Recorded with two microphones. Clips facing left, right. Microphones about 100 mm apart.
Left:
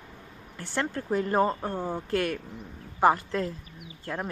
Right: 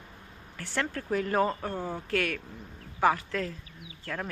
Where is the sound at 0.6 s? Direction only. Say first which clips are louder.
Left 2 dB; 30° left (ahead or behind).